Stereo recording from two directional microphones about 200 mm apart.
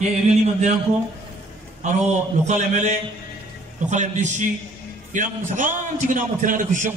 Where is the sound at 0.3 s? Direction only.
35° right (ahead or behind).